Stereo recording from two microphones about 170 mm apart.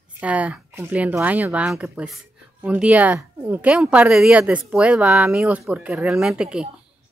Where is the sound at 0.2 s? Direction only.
10° right (ahead or behind).